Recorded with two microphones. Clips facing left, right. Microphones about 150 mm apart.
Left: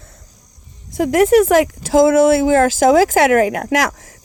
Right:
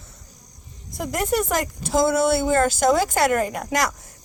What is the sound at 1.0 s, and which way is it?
Speech, 90° left.